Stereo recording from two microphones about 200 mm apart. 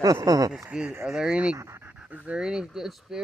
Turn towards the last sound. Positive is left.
turn(degrees=0)  # may be behind; listen again after turning